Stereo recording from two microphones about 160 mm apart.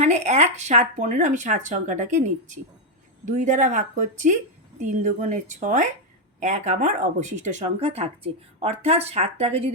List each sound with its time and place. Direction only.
0.0 s speech: 45° right (ahead or behind)